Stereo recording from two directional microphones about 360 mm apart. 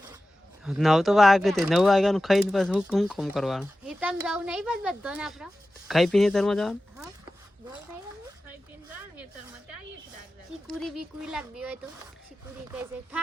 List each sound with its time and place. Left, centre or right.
0.6 s speech: centre
10.7 s speech: centre